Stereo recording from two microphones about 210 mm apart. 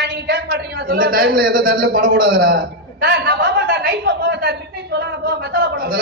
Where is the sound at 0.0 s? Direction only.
50° right (ahead or behind).